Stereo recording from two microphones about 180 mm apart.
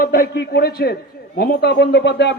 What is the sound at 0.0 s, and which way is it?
A man's voice, 50° left (ahead or behind).